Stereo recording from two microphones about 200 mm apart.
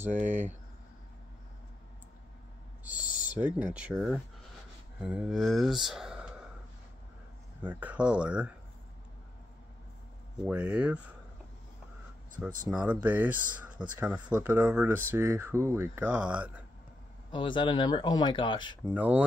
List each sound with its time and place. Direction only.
0.0 s speech: 10° right (ahead or behind)
2.8 s owl: 5° right (ahead or behind)
3.3 s speech: 10° right (ahead or behind)
7.6 s speech: 10° right (ahead or behind)
10.4 s speech: 5° right (ahead or behind)
12.6 s speech: 5° right (ahead or behind)
17.3 s speech: 25° left (ahead or behind)
18.9 s speech: 10° right (ahead or behind)